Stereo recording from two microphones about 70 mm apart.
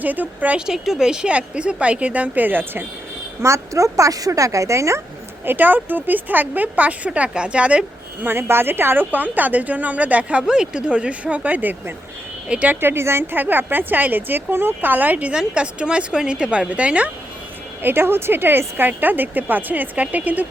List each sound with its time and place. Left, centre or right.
0.0 s a woman's voice: right
0.6 s speech: centre; by 2.8 s right
3.4 s speech: right
5.5 s a woman's voice: right
8.3 s a woman's voice: right; by 12.7 s centre
12.8 s a woman's voice: right; by 17.1 s centre
17.8 s a woman's voice: right